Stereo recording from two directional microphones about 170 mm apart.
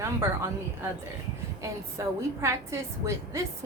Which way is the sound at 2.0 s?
20° right (ahead or behind).